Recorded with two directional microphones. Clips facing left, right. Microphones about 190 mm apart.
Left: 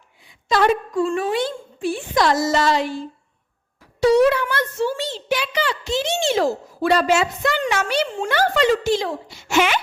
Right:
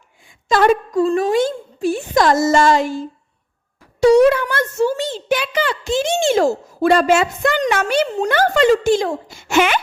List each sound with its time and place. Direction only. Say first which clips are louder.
0.3 s a woman's voice: right 4 dB; 50° right (ahead or behind)